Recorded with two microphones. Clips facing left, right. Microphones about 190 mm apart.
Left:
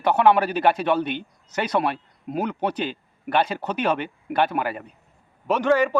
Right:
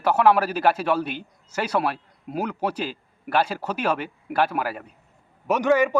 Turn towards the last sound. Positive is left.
turn(degrees=-10)  # may be behind; listen again after turning